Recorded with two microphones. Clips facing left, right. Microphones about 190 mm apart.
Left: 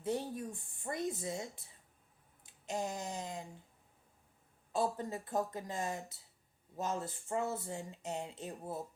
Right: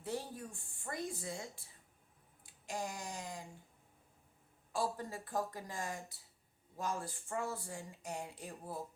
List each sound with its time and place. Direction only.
0.0 s speech: 20° left (ahead or behind)
2.5 s a sound: 20° left (ahead or behind)
4.7 s speech: 20° left (ahead or behind)